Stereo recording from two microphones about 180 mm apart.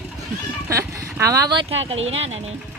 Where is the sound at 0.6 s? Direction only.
15° right (ahead or behind); by 2.5 s 35° right (ahead or behind).